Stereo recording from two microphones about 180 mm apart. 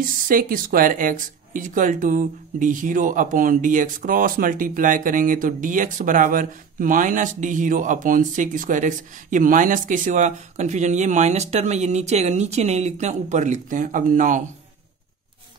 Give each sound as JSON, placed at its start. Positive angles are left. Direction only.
{"t": 0.0, "sound": "speech", "side_deg": -50}